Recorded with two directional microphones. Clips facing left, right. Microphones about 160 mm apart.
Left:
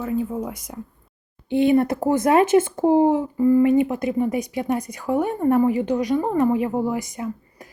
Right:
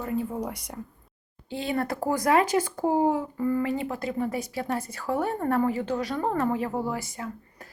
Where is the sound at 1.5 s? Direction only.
20° left (ahead or behind).